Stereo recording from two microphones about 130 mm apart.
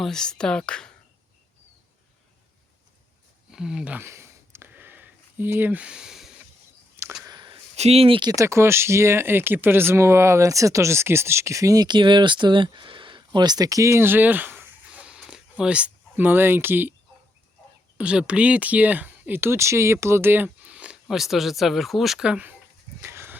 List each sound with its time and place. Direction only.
0.0 s speech: 5° left (ahead or behind)
3.5 s a sound: 5° right (ahead or behind)
7.3 s a sound: 35° right (ahead or behind)
7.8 s speech: 50° right (ahead or behind)
8.4 s speech: 20° right (ahead or behind)
17.9 s speech: 10° right (ahead or behind)
23.0 s dog: 20° right (ahead or behind)